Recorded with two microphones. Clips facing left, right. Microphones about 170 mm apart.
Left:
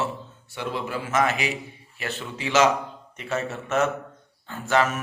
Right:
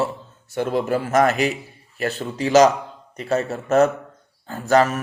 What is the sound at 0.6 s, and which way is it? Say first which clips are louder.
A man's voice: right 8 dB; 45° right (ahead or behind).